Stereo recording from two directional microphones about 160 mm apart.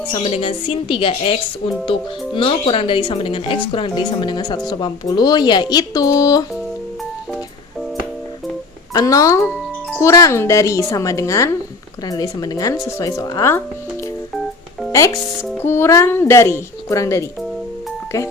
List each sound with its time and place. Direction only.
0.1 s speech: 30° left (ahead or behind)
8.9 s speech: 20° left (ahead or behind)
14.9 s speech: 20° left (ahead or behind)